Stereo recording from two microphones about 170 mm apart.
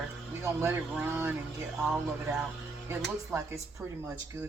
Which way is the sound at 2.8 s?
15° right (ahead or behind).